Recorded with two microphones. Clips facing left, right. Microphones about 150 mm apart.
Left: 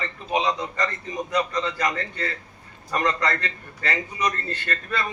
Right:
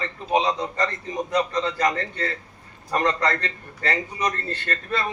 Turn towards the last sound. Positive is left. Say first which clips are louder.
# right 1 dB
turn(degrees=-25)  # may be behind; listen again after turning